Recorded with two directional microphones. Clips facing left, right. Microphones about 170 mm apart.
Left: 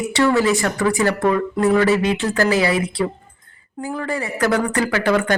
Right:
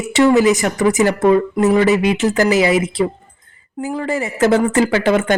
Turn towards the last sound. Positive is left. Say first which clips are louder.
# right 3 dB
turn(degrees=-20)  # may be behind; listen again after turning